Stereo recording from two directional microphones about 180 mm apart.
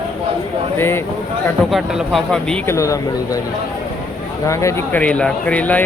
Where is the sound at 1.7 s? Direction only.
Centre (ahead or behind).